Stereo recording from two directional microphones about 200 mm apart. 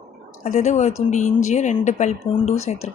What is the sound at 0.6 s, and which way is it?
A woman's voice, 35° left (ahead or behind).